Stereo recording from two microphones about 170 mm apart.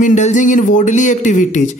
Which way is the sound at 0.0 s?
45° left (ahead or behind).